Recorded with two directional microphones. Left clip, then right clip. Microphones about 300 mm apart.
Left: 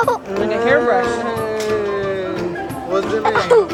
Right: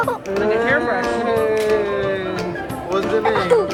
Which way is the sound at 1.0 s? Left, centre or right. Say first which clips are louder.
Even; centre.